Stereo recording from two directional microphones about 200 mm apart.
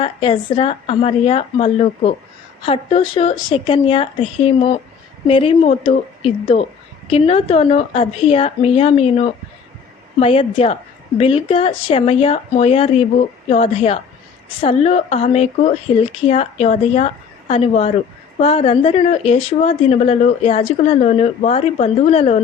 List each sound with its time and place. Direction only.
0.0 s a woman's voice: 25° left (ahead or behind)